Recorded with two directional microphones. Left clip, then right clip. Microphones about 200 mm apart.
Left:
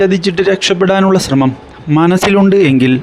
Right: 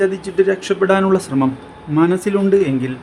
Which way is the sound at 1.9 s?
45° left (ahead or behind).